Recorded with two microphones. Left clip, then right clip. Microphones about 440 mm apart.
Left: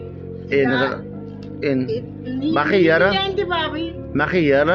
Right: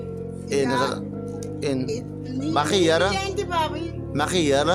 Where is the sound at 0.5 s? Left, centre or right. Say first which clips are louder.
Left 4 dB; right.